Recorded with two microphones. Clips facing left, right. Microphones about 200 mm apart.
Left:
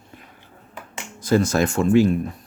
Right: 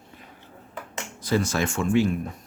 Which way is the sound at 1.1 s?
45° left (ahead or behind).